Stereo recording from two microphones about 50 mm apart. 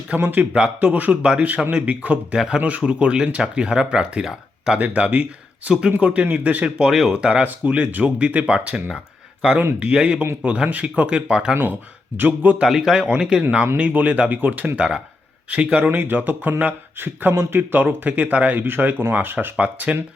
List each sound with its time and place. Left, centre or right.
0.2 s speech: right
1.2 s speech: centre
4.3 s a sound: centre
4.8 s speech: right
6.8 s speech: centre
7.1 s speech: centre
12.1 s speech: right
12.6 s speech: centre
13.7 s speech: right
14.8 s speech: right
15.9 s speech: right
19.5 s speech: right